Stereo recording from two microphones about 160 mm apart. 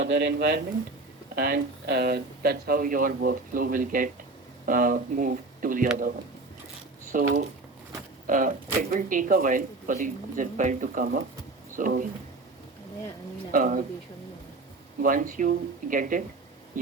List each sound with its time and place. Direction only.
0.0 s speech: 90° right; by 5.9 s 60° right (ahead or behind)
7.1 s speech: 55° right (ahead or behind)
13.5 s speech: 55° right (ahead or behind)
15.0 s speech: 55° right (ahead or behind)